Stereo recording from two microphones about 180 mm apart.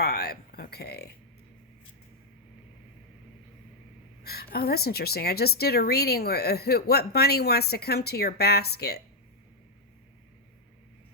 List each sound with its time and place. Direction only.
0.0 s speech: 60° left (ahead or behind)
4.2 s a sound: 60° left (ahead or behind)
4.5 s speech: 60° left (ahead or behind)